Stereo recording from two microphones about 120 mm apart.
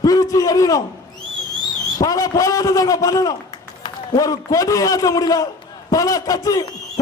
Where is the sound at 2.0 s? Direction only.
30° left (ahead or behind).